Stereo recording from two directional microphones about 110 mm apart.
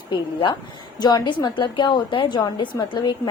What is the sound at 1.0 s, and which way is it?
A woman's voice, 40° left (ahead or behind).